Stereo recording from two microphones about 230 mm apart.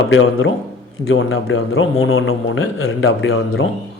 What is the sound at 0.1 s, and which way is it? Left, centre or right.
A man's voice, left.